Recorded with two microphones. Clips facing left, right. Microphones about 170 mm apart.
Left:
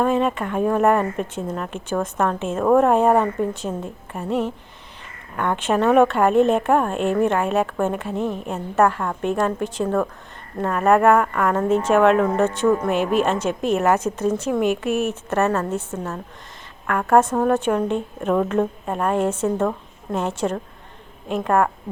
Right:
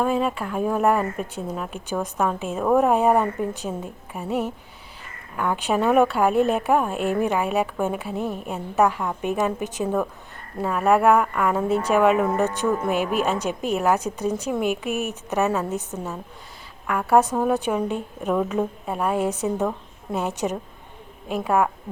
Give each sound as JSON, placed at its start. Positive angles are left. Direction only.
{"t": 0.0, "sound": "a woman's voice", "side_deg": 0}
{"t": 14.8, "sound": "a woman's voice", "side_deg": 35}
{"t": 15.3, "sound": "a woman's voice", "side_deg": -5}